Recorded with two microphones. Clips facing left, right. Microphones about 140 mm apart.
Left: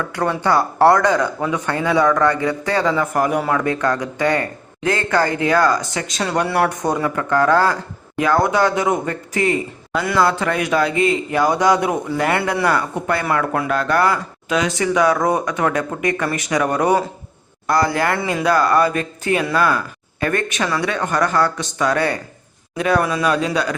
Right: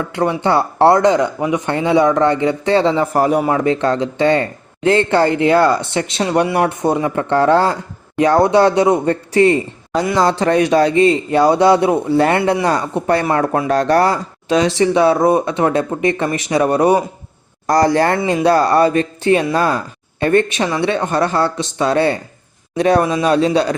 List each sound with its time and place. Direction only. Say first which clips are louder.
0.0 s speech: right 3 dB; 20° right (ahead or behind)
17.7 s speech: right 5 dB; 40° right (ahead or behind)